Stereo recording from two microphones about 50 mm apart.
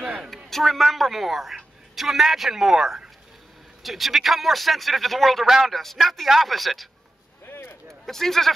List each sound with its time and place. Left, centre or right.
0.5 s a man's voice: centre
7.4 s a sound: left
7.9 s speech: centre